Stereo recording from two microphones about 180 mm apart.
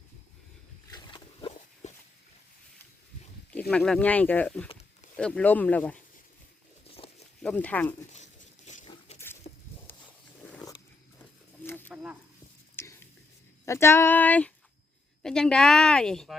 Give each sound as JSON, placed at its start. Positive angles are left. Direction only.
{"t": 0.9, "sound": "wild animals", "side_deg": 25}
{"t": 1.8, "sound": "walk", "side_deg": 40}
{"t": 3.7, "sound": "speech", "side_deg": 5}
{"t": 6.9, "sound": "a sound", "side_deg": 35}
{"t": 7.4, "sound": "speech", "side_deg": 10}
{"t": 8.1, "sound": "a sound", "side_deg": 40}
{"t": 9.5, "sound": "walk", "side_deg": 50}
{"t": 11.2, "sound": "wild animals", "side_deg": 10}
{"t": 12.7, "sound": "whispering", "side_deg": 10}
{"t": 13.7, "sound": "a woman's voice", "side_deg": 15}